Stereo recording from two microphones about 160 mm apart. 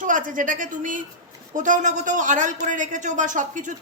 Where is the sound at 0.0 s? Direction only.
55° right (ahead or behind).